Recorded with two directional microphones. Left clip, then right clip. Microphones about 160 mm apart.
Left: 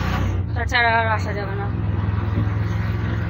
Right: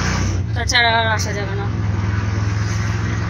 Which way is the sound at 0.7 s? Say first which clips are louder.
Right 3 dB; 20° right (ahead or behind).